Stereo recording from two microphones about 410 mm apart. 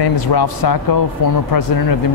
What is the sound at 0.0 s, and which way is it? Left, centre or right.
Speech, left.